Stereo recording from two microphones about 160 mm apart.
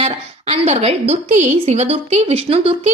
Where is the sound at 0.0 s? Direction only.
40° right (ahead or behind).